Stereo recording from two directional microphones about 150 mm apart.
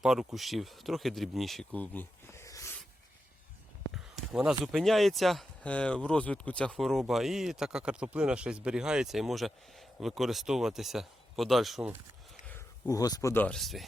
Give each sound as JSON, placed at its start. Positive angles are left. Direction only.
{"t": 0.0, "sound": "speech", "side_deg": -5}
{"t": 3.9, "sound": "speech", "side_deg": 0}
{"t": 12.5, "sound": "a sound", "side_deg": 10}
{"t": 12.9, "sound": "speech", "side_deg": 25}
{"t": 13.3, "sound": "speech", "side_deg": 10}